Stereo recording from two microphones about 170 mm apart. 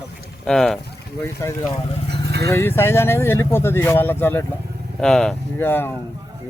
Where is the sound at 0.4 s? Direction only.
Centre (ahead or behind).